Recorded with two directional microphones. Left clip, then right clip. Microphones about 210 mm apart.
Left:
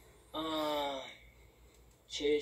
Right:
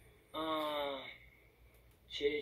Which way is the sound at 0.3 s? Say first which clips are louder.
Left 2 dB; 50° left (ahead or behind).